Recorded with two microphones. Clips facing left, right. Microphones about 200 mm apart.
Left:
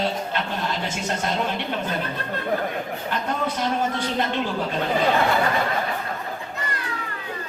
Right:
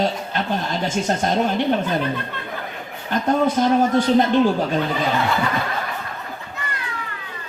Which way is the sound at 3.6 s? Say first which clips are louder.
Right 7 dB; 40° right (ahead or behind).